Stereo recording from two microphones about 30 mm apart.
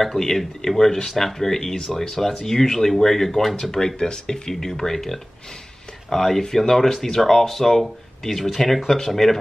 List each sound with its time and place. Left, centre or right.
0.0 s speech: centre
3.7 s speech: left